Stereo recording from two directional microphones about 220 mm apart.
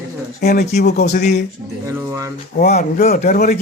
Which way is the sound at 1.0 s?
35° left (ahead or behind).